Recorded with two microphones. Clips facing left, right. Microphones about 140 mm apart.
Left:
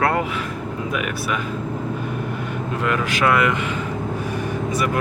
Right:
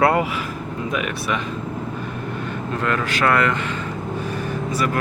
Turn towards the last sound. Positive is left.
turn(degrees=15)  # may be behind; listen again after turning